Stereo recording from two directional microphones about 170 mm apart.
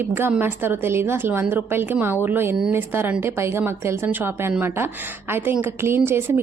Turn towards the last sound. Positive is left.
turn(degrees=-15)  # may be behind; listen again after turning